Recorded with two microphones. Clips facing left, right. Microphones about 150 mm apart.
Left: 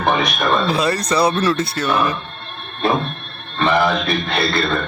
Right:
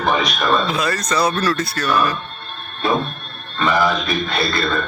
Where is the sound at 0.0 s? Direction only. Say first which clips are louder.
Left 1 dB; 55° left (ahead or behind).